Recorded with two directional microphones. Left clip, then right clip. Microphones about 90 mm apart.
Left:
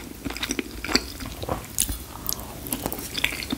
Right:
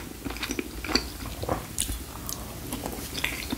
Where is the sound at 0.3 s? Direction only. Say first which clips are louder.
Left 3 dB; 35° left (ahead or behind).